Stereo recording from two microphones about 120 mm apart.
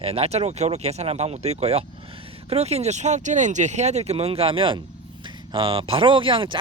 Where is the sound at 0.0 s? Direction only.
55° right (ahead or behind).